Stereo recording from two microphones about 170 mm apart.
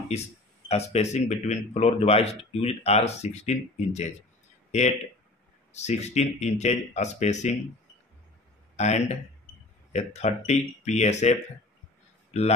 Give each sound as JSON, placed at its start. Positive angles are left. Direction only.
{"t": 0.1, "sound": "speech", "side_deg": 40}
{"t": 5.7, "sound": "speech", "side_deg": 40}
{"t": 8.7, "sound": "a man's voice", "side_deg": 40}